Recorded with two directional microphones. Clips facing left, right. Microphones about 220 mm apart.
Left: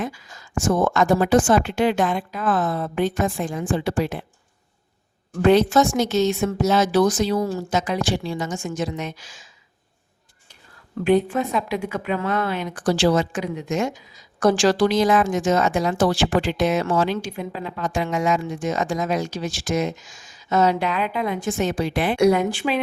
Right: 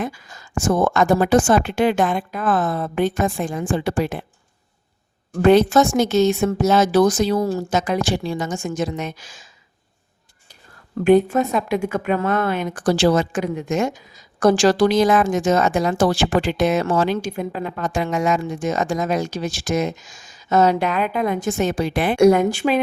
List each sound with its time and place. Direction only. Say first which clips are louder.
0.0 s speech: right 2 dB; 50° right (ahead or behind)
5.4 s speech: right 2 dB; 50° right (ahead or behind)
11.0 s speech: right 4 dB; 45° right (ahead or behind)